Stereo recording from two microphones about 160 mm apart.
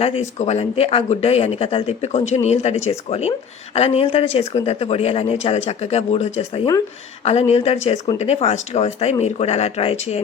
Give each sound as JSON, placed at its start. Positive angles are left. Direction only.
{"t": 0.0, "sound": "speech", "side_deg": 40}